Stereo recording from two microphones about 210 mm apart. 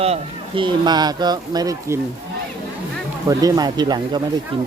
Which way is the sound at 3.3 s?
15° right (ahead or behind).